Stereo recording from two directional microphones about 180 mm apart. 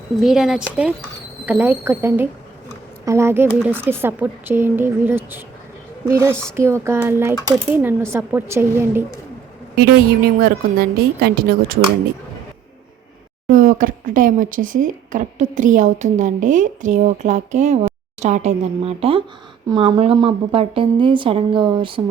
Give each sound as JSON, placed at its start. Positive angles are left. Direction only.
{"t": 0.2, "sound": "speech", "side_deg": 0}
{"t": 10.4, "sound": "a woman's voice", "side_deg": -60}
{"t": 13.5, "sound": "a woman's voice", "side_deg": -50}